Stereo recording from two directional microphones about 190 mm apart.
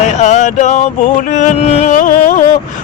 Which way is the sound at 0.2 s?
40° left (ahead or behind).